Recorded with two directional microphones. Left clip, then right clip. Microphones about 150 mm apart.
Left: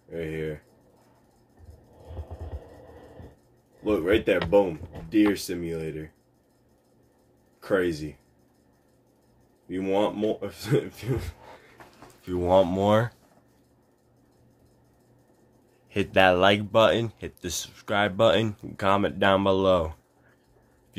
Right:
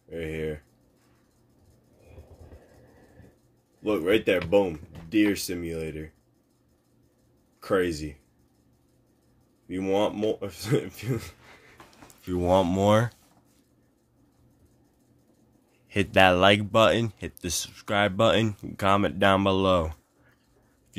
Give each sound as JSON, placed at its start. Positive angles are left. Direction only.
{"t": 0.1, "sound": "a sound", "side_deg": -55}
{"t": 3.8, "sound": "speech", "side_deg": -55}
{"t": 7.6, "sound": "speech", "side_deg": -55}
{"t": 9.7, "sound": "speech", "side_deg": -55}
{"t": 15.9, "sound": "speech", "side_deg": -55}